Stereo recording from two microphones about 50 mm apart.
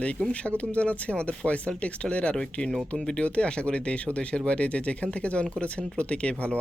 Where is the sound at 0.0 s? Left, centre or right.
Left.